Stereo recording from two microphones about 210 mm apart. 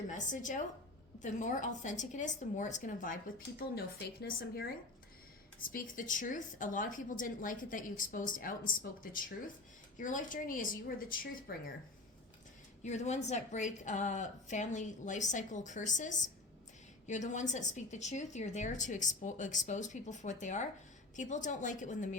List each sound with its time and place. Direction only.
0.1 s a woman's voice: 35° left (ahead or behind)
5.7 s a woman's voice: 40° left (ahead or behind)
10.0 s a woman's voice: 40° left (ahead or behind)
12.8 s a woman's voice: 35° left (ahead or behind)